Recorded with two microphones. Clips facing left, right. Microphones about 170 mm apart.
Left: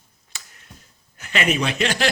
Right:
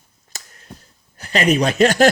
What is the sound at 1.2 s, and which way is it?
Speech, 35° right (ahead or behind).